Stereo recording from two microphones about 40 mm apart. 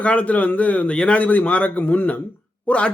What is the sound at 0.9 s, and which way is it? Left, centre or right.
Speech, left.